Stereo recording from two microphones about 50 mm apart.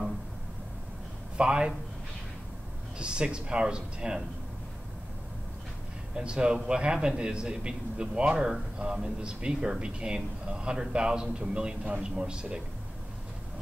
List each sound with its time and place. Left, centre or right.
1.3 s speech: centre
3.0 s a man's voice: centre
6.1 s a man's voice: centre